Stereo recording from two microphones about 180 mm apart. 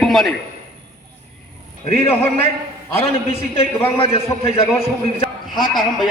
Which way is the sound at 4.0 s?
35° left (ahead or behind).